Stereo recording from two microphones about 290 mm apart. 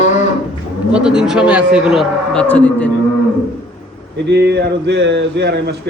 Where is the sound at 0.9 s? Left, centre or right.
Centre.